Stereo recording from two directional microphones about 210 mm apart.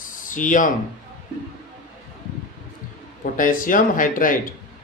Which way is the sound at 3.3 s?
40° left (ahead or behind).